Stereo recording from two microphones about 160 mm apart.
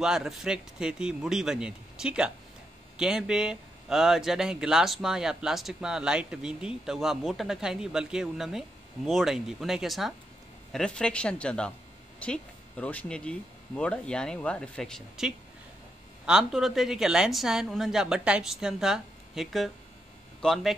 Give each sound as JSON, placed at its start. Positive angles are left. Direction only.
{"t": 0.0, "sound": "speech", "side_deg": 0}